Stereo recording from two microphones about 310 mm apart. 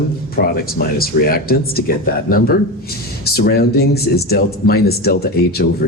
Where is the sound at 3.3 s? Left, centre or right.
Left.